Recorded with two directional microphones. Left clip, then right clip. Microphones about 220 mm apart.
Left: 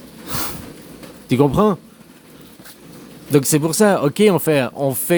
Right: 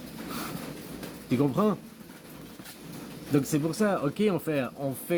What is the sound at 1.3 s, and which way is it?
Speech, 40° left (ahead or behind).